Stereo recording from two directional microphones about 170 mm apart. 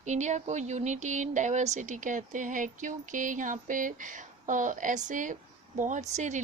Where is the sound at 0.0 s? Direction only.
45° right (ahead or behind).